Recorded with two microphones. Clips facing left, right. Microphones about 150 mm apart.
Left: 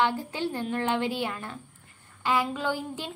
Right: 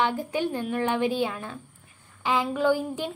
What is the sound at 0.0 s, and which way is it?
A woman's voice, 15° right (ahead or behind).